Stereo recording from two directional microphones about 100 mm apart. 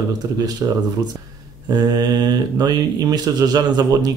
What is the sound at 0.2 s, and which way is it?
Speech, 35° right (ahead or behind).